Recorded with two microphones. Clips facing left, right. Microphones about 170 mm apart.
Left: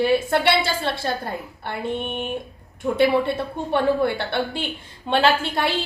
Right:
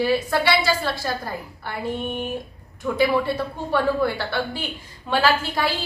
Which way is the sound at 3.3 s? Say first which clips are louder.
Left 1 dB; 25° left (ahead or behind).